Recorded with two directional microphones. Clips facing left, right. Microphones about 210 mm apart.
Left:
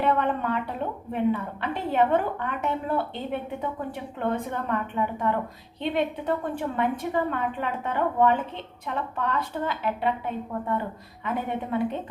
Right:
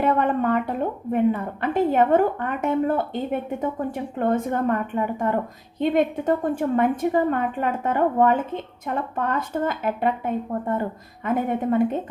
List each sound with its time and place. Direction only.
0.0 s a sound: 45° right (ahead or behind)
1.1 s a woman's voice: 45° right (ahead or behind)
4.2 s a woman's voice: 45° right (ahead or behind)